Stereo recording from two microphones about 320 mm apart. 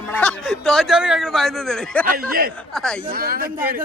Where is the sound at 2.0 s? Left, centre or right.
Right.